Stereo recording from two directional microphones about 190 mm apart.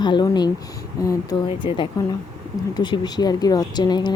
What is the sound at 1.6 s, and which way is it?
Speech, 25° left (ahead or behind).